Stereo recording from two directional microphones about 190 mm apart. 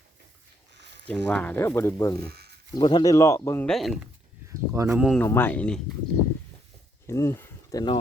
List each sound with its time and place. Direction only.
1.0 s speech: 5° left (ahead or behind)
3.7 s speech: centre (ahead or behind)
4.4 s speech: 15° right (ahead or behind)
4.9 s speech: centre (ahead or behind)
5.2 s speech: 10° left (ahead or behind)
7.1 s speech: 15° left (ahead or behind)